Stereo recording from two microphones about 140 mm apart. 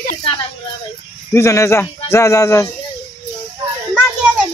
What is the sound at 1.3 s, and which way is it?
Speech, 20° left (ahead or behind).